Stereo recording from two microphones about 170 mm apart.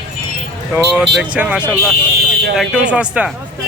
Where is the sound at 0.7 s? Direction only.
Centre (ahead or behind).